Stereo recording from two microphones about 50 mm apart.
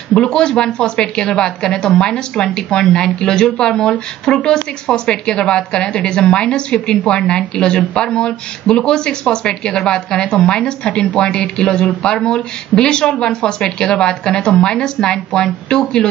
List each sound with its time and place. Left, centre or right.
0.2 s a woman's voice: centre